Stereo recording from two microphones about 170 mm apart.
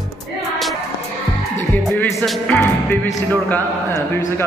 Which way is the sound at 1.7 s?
10° left (ahead or behind).